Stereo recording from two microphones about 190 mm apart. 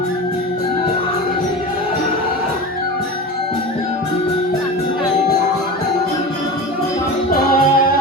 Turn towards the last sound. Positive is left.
turn(degrees=50)  # may be behind; listen again after turning